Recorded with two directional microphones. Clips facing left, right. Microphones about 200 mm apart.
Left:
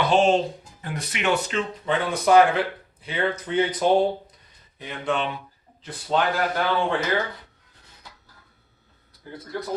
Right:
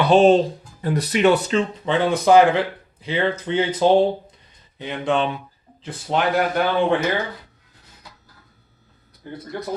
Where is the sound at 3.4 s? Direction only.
30° right (ahead or behind).